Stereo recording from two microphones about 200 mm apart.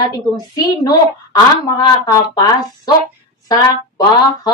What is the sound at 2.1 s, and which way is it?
A woman's voice, 15° left (ahead or behind).